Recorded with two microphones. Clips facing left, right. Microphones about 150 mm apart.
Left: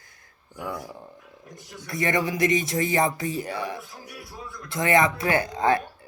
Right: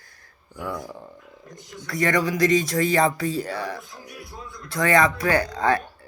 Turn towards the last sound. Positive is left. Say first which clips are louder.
# right 1 dB
turn(degrees=20)  # may be behind; listen again after turning